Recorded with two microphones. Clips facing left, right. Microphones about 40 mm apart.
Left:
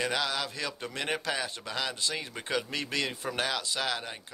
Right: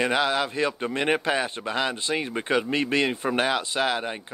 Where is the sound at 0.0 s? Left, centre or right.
Right.